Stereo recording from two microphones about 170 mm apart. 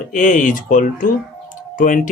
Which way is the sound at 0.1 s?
50° left (ahead or behind).